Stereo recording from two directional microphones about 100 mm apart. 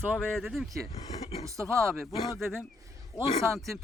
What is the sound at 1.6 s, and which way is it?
Speech, centre (ahead or behind).